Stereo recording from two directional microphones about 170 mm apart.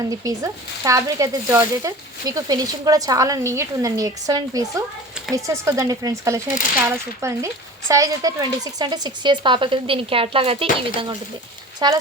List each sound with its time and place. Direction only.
0.1 s speech: 20° right (ahead or behind)